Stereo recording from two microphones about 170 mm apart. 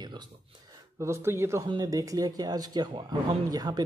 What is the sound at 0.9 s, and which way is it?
Speech, 15° right (ahead or behind).